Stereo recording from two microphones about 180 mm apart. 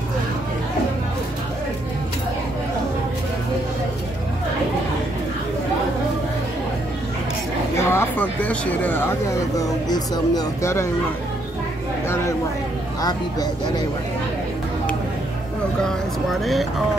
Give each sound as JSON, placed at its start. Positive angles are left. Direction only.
{"t": 7.7, "sound": "speech", "side_deg": 15}
{"t": 12.1, "sound": "speech", "side_deg": 15}
{"t": 15.8, "sound": "speech", "side_deg": 0}